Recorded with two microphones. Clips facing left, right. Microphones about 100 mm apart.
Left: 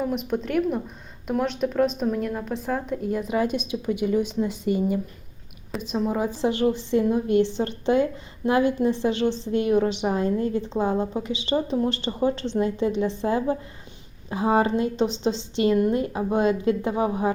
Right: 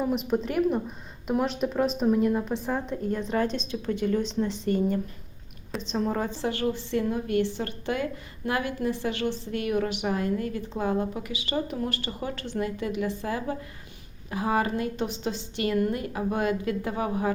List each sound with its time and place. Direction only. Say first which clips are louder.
0.0 s a woman's voice: even; centre (ahead or behind); by 17.3 s 20° left (ahead or behind)